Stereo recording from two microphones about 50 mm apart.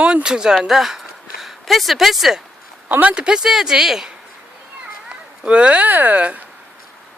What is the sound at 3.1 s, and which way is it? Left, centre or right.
Speech, centre.